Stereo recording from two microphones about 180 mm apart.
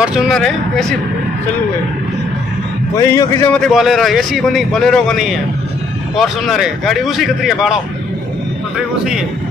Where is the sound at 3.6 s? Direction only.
Centre (ahead or behind).